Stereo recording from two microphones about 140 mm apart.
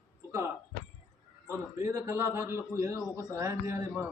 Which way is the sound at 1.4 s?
20° right (ahead or behind).